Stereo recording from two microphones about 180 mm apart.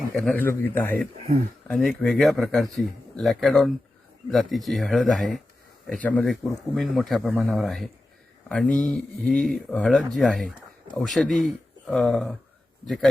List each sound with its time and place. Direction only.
0.3 s a man's voice: 10° left (ahead or behind)